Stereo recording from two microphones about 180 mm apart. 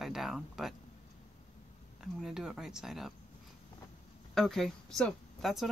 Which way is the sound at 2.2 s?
5° right (ahead or behind).